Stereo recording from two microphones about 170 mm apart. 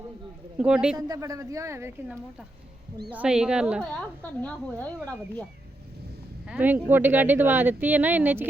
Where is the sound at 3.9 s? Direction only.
5° left (ahead or behind).